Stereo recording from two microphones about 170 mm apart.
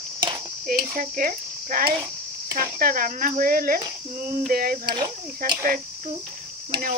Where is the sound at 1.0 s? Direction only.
55° right (ahead or behind).